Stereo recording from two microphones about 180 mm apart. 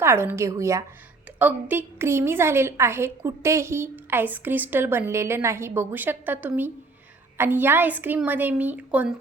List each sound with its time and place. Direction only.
0.0 s a woman's voice: 15° right (ahead or behind)